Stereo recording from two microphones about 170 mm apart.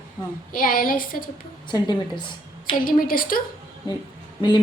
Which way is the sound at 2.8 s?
55° left (ahead or behind).